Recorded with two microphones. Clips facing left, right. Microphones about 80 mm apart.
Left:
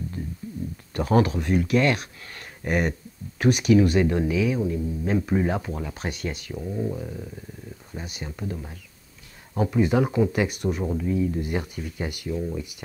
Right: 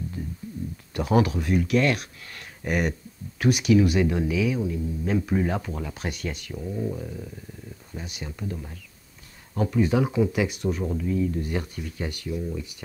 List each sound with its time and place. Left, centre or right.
0.9 s speech: centre
8.4 s speech: centre
10.8 s speech: centre
12.3 s speech: left